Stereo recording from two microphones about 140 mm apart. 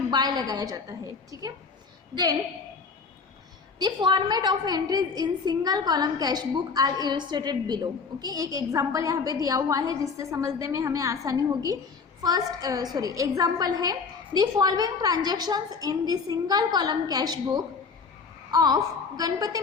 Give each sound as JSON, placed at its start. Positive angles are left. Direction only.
{"t": 0.1, "sound": "a woman's voice", "side_deg": -30}
{"t": 3.8, "sound": "a woman's voice", "side_deg": -30}